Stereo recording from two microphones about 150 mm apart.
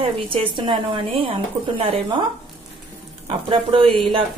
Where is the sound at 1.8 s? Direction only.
40° right (ahead or behind).